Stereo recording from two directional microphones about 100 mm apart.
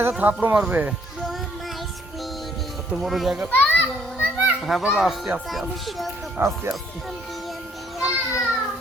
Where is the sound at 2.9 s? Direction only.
5° right (ahead or behind).